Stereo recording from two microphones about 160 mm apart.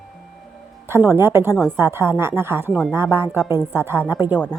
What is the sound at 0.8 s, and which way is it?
A woman's voice, 15° right (ahead or behind).